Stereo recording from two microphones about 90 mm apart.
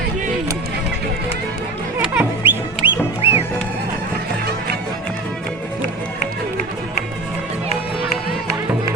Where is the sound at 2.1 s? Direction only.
25° right (ahead or behind).